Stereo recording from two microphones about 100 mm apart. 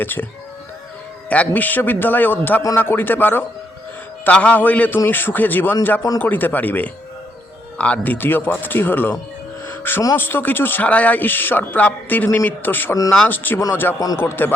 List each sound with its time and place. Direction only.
0.0 s speech: 20° left (ahead or behind)
1.3 s a man's voice: 15° left (ahead or behind)
9.6 s music: 20° left (ahead or behind)
10.2 s speech: 20° left (ahead or behind)